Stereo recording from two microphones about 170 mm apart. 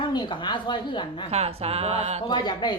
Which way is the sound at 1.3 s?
35° right (ahead or behind).